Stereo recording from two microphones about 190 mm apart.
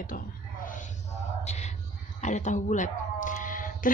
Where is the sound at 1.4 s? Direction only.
35° left (ahead or behind).